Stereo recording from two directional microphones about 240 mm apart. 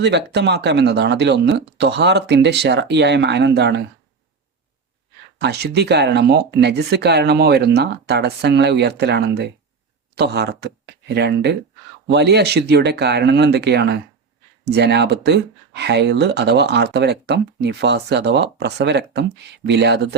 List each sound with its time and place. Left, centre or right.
0.0 s speech: right
5.4 s speech: right